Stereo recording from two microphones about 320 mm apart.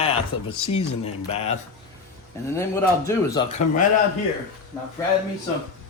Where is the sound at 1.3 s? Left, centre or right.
Centre.